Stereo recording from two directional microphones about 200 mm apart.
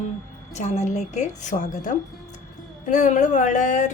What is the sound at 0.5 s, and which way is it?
A woman's voice, 35° left (ahead or behind).